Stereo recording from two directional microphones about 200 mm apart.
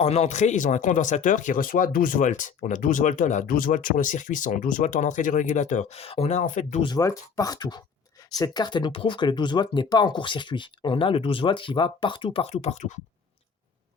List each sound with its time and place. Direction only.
0.0 s speech: 35° left (ahead or behind)
6.8 s speech: 20° left (ahead or behind); by 12.9 s 35° left (ahead or behind)